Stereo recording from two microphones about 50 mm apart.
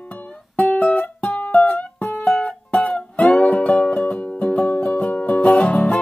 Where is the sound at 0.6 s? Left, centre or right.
Left.